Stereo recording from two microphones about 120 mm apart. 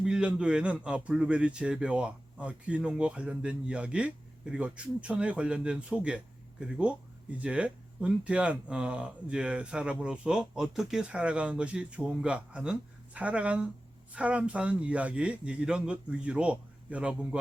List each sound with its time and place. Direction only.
0.0 s a man's voice: 10° right (ahead or behind)